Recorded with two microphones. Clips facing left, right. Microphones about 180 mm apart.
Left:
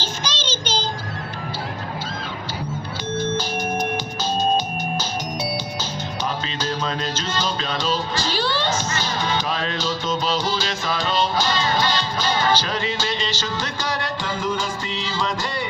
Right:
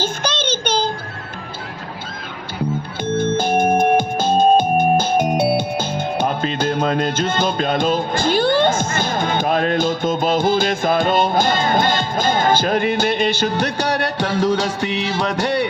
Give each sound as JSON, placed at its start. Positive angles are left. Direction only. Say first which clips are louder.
{"t": 0.0, "sound": "child singing", "louder": "right 7 dB", "side_deg": -55}
{"t": 3.1, "sound": "music", "louder": "right 7 dB", "side_deg": -55}